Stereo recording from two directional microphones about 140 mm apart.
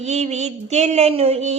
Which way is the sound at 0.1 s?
55° right (ahead or behind).